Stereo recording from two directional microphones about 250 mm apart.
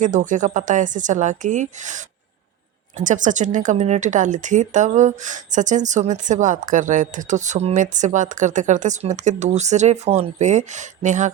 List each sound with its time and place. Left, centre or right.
0.0 s speech: right
3.0 s speech: right